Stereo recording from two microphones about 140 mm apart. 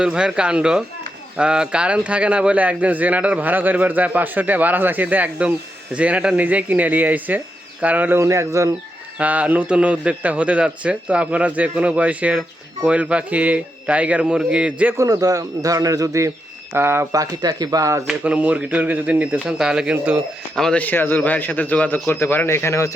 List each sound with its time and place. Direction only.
0.0 s speech: 5° right (ahead or behind)
9.1 s speech: 10° right (ahead or behind)
14.9 s a man's voice: 25° right (ahead or behind)
18.1 s speech: 10° right (ahead or behind)
20.6 s a man's voice: 5° left (ahead or behind)